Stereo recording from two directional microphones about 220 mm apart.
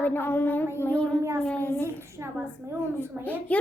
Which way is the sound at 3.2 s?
5° left (ahead or behind).